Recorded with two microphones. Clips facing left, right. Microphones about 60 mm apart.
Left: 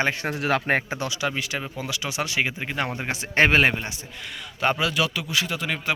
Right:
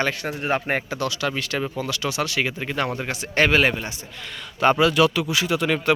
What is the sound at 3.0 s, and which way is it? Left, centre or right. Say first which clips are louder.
Speech: left 3 dB; left.